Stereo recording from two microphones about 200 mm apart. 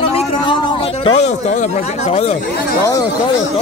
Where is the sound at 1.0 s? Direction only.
35° left (ahead or behind).